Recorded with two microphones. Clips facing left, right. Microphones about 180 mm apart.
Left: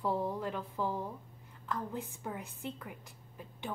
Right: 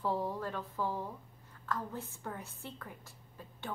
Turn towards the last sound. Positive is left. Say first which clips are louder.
# left 2 dB
turn(degrees=15)  # may be behind; listen again after turning